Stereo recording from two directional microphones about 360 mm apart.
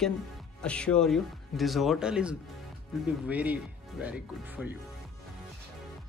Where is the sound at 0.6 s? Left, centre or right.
Centre.